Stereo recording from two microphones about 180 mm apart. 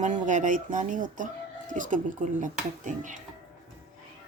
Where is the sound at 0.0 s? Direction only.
45° right (ahead or behind).